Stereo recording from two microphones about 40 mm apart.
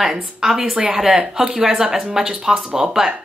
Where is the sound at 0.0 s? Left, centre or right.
Centre.